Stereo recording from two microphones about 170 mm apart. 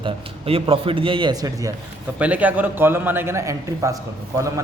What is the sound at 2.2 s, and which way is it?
A man's voice, 10° right (ahead or behind).